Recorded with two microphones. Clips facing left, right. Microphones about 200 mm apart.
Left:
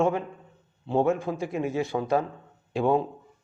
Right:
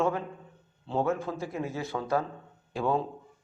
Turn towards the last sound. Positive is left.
turn(degrees=20)  # may be behind; listen again after turning